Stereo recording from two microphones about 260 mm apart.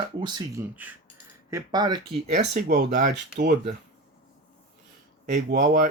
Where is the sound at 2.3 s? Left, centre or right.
Right.